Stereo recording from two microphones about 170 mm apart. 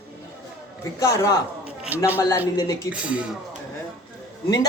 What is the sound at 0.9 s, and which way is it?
Speech, 20° left (ahead or behind).